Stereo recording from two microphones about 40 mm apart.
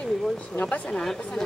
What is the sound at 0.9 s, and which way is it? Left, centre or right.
Speech, centre.